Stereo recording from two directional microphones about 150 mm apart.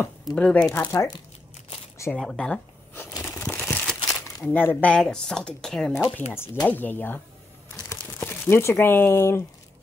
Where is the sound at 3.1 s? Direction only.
20° left (ahead or behind).